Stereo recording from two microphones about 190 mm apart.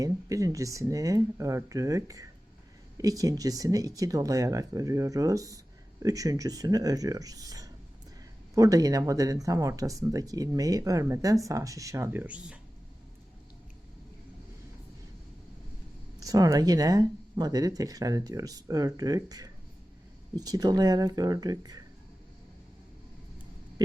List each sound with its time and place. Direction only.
0.0 s speech: 15° right (ahead or behind)
16.2 s speech: 20° right (ahead or behind)